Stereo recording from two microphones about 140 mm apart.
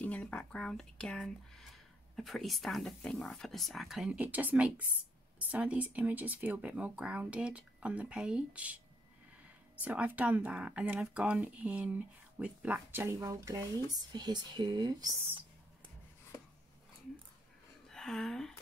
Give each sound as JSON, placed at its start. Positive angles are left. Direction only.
{"t": 0.0, "sound": "speech", "side_deg": 10}
{"t": 17.8, "sound": "speech", "side_deg": 5}